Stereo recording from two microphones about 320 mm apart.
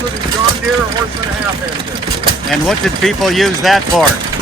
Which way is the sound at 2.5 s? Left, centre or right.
Centre.